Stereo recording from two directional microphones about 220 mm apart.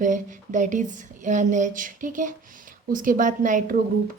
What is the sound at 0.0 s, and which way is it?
Speech, 35° right (ahead or behind).